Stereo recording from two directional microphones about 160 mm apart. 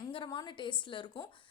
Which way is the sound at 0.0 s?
30° left (ahead or behind).